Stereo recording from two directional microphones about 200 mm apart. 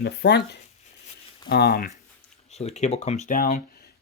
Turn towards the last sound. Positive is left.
turn(degrees=40)  # may be behind; listen again after turning